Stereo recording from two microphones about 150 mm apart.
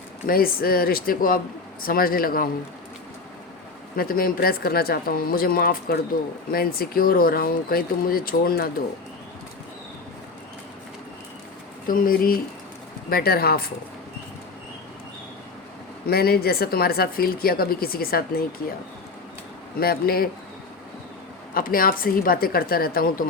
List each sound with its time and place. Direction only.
0.3 s a woman's voice: 80° left
3.9 s speech: 80° left
11.9 s a woman's voice: 70° left (ahead or behind)
13.1 s speech: 90° left
16.0 s speech: 90° left
19.8 s speech: 90° left
21.5 s a woman's voice: 75° left (ahead or behind)